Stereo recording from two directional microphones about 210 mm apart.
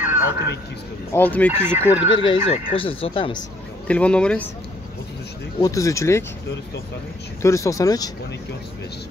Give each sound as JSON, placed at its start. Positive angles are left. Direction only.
{"t": 0.0, "sound": "a sound", "side_deg": -10}
{"t": 1.1, "sound": "speech", "side_deg": 10}
{"t": 1.5, "sound": "speech", "side_deg": -10}
{"t": 2.1, "sound": "speech", "side_deg": 25}
{"t": 3.8, "sound": "speech", "side_deg": 5}
{"t": 5.6, "sound": "speech", "side_deg": 15}
{"t": 7.4, "sound": "speech", "side_deg": 15}